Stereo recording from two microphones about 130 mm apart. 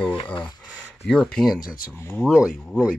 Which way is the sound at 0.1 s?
40° left (ahead or behind).